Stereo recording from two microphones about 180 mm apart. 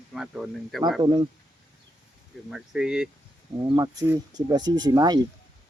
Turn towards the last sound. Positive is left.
turn(degrees=-20)  # may be behind; listen again after turning